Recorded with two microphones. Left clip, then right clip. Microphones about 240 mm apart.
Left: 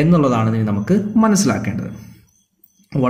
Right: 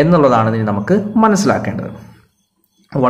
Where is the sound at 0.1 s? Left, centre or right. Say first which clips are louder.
Right 6 dB; left.